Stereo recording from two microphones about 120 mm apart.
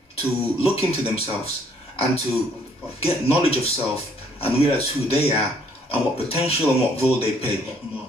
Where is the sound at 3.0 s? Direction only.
55° left (ahead or behind).